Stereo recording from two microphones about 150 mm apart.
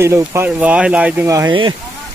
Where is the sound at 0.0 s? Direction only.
15° right (ahead or behind).